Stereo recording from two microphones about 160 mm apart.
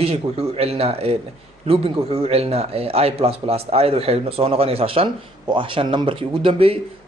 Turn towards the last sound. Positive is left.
turn(degrees=-35)  # may be behind; listen again after turning